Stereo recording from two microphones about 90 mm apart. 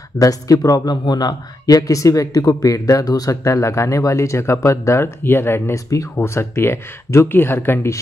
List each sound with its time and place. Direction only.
0.2 s speech: 40° left (ahead or behind)